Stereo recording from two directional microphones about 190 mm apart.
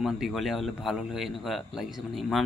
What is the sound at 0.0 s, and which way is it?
A man's voice, centre (ahead or behind).